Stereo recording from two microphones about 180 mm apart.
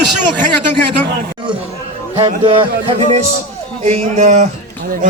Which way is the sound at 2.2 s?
30° right (ahead or behind).